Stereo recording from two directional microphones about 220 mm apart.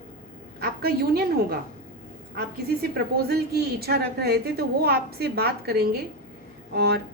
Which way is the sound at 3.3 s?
45° right (ahead or behind).